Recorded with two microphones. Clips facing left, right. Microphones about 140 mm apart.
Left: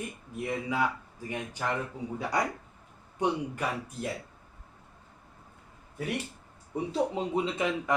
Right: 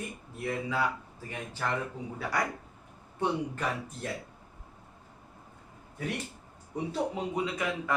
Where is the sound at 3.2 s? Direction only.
10° left (ahead or behind).